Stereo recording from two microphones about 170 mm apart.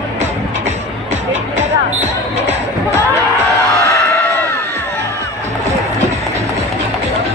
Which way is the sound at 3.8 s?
15° left (ahead or behind).